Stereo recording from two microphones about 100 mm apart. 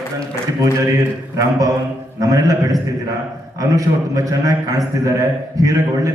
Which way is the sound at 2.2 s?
40° right (ahead or behind).